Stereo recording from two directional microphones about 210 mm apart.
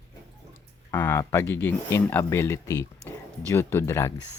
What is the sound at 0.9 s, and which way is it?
Speech, 10° left (ahead or behind).